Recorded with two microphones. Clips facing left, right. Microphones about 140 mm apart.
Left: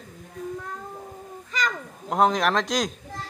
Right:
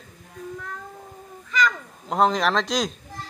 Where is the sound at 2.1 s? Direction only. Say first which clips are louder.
Even; 10° left (ahead or behind).